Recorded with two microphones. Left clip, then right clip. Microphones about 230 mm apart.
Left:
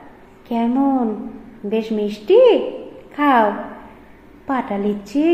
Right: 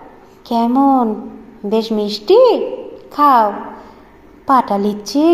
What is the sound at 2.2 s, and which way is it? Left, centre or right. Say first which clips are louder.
A woman's voice: right 2 dB; right.